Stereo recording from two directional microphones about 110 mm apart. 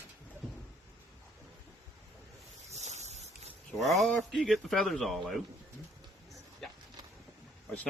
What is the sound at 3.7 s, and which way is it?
Speech, centre (ahead or behind).